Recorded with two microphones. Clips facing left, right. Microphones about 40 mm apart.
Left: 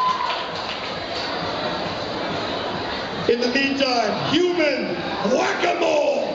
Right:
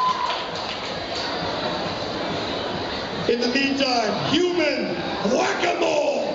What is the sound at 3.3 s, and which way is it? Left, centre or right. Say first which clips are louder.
A man's voice: left 2 dB; centre.